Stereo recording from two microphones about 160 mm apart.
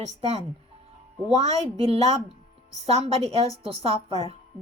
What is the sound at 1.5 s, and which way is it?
A woman's voice, 40° right (ahead or behind).